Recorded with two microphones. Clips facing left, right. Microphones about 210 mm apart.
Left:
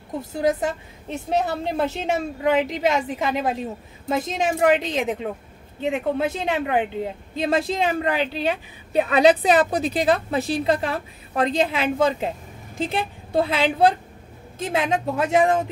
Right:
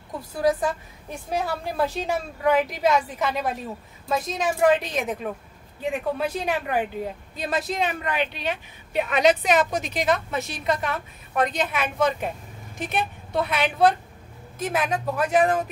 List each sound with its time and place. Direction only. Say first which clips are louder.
0.2 s a woman's voice: even; 25° left (ahead or behind)